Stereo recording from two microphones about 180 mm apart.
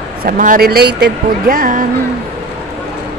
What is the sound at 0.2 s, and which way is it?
Speech, 50° right (ahead or behind).